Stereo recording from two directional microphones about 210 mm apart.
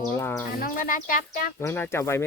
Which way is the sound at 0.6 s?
40° left (ahead or behind).